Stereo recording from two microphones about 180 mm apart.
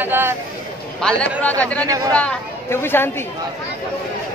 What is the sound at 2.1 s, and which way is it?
Speech, 10° left (ahead or behind).